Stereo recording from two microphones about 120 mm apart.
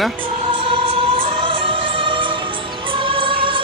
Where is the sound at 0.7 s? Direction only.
50° right (ahead or behind).